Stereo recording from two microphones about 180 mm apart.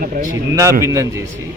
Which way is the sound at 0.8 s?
15° right (ahead or behind).